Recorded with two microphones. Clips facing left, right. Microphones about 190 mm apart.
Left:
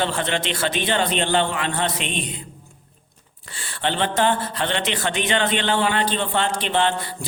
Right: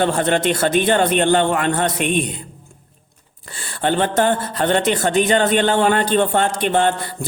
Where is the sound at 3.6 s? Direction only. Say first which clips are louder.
Right 5 dB; 45° right (ahead or behind).